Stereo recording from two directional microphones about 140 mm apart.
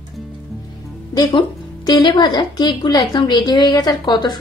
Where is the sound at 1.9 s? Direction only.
35° left (ahead or behind).